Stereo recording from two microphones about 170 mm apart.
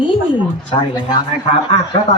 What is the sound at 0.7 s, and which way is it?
Speech, 25° left (ahead or behind).